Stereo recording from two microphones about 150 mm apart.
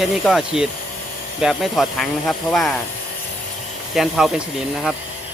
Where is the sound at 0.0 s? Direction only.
Centre (ahead or behind).